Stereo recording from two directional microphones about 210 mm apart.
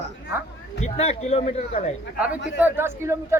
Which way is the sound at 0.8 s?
30° left (ahead or behind).